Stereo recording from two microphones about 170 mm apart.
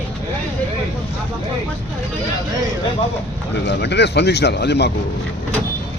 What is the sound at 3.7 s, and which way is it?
Speech, 85° left.